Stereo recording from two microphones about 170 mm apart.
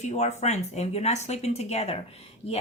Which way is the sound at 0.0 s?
40° left (ahead or behind).